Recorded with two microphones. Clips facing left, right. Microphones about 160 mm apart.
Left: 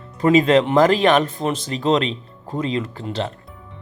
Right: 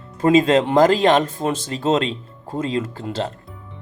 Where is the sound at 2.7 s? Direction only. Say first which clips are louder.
Right 1 dB; 45° right (ahead or behind).